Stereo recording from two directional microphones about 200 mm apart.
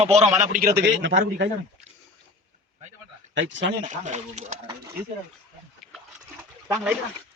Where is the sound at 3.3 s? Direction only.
65° right (ahead or behind).